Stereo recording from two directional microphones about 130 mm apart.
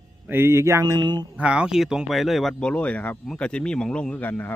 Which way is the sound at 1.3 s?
10° right (ahead or behind).